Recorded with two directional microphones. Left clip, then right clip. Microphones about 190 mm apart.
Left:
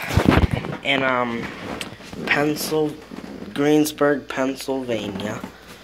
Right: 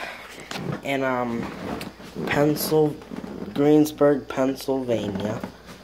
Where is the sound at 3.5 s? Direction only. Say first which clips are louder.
Even; 15° right (ahead or behind).